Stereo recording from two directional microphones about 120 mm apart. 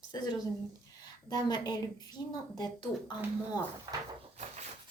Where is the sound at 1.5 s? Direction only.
35° left (ahead or behind).